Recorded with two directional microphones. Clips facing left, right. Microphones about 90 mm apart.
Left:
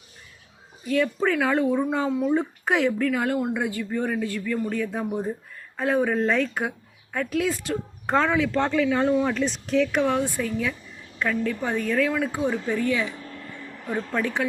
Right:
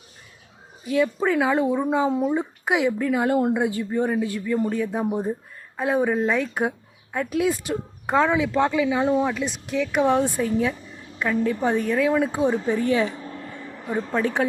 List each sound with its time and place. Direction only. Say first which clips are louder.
0.9 s a woman's voice: right 1 dB; 15° right (ahead or behind)
10.0 s speech: right 3 dB; 25° right (ahead or behind)
13.8 s a woman's voice: right 2 dB; 15° right (ahead or behind)